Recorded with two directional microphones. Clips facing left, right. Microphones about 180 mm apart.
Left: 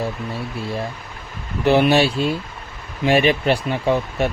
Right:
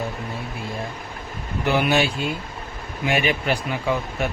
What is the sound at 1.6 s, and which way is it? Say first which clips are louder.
Speech: left 5 dB; 35° left (ahead or behind).